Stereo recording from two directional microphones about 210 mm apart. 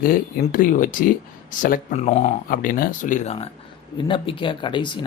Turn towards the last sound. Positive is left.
turn(degrees=20)  # may be behind; listen again after turning